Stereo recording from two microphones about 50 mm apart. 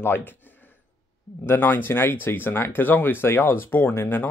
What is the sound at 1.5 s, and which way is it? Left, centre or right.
Speech, left.